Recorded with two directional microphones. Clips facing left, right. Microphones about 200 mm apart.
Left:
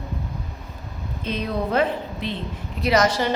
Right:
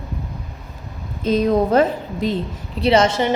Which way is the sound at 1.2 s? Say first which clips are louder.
Right 9 dB; 40° right (ahead or behind).